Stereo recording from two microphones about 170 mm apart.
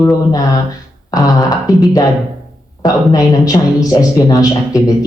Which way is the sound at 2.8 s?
20° left (ahead or behind).